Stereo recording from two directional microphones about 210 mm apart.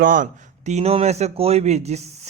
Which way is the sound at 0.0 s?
40° right (ahead or behind).